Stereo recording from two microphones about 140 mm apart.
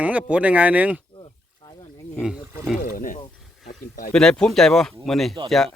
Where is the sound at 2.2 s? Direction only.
5° right (ahead or behind).